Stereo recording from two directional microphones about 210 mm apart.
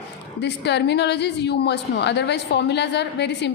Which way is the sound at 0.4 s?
55° left (ahead or behind).